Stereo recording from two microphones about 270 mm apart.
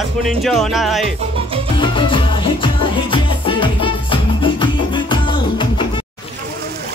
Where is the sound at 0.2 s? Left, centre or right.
Centre.